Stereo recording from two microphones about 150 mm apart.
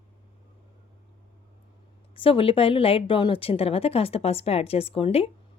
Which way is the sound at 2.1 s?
35° left (ahead or behind).